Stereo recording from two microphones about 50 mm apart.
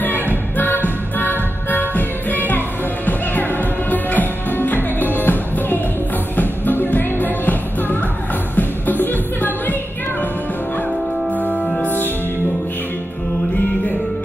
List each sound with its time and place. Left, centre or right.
0.8 s music: left
11.3 s music: left